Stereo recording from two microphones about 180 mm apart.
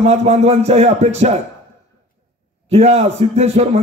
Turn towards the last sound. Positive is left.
turn(degrees=-35)  # may be behind; listen again after turning